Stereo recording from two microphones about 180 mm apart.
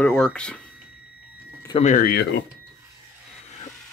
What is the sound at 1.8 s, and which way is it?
Speech, 50° left (ahead or behind).